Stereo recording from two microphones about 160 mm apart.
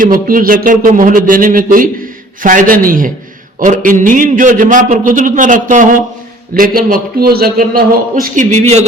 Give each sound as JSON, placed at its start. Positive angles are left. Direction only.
{"t": 0.0, "sound": "a man's voice", "side_deg": -60}